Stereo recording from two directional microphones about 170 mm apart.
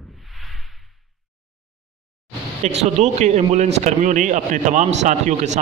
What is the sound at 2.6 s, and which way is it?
A man's voice, 40° right (ahead or behind).